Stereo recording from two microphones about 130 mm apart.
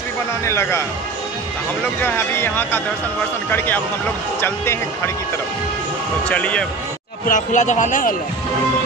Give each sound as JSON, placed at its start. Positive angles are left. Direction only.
{"t": 0.5, "sound": "speech", "side_deg": 20}
{"t": 2.0, "sound": "speech", "side_deg": 15}
{"t": 6.2, "sound": "speech", "side_deg": 10}
{"t": 7.2, "sound": "a man's voice", "side_deg": 70}